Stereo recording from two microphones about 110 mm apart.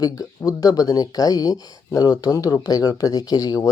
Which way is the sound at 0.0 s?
35° left (ahead or behind).